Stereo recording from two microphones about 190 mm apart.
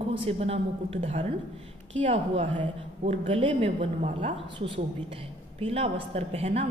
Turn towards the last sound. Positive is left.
turn(degrees=-35)  # may be behind; listen again after turning